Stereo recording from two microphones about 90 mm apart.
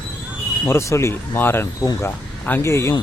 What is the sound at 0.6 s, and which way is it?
Speech, 30° left (ahead or behind).